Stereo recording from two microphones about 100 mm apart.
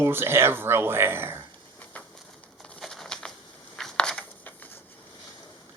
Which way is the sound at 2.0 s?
15° left (ahead or behind).